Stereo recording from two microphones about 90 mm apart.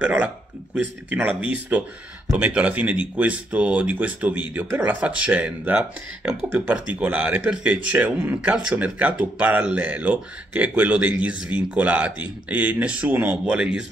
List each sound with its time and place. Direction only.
0.0 s speech: 15° right (ahead or behind)